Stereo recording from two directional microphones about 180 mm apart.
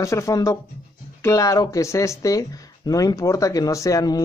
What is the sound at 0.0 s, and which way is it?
Speech, 15° left (ahead or behind).